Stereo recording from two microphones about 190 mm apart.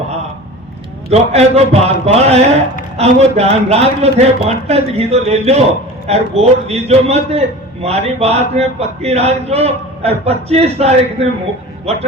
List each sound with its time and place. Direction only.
1.1 s a man's voice: 35° right (ahead or behind)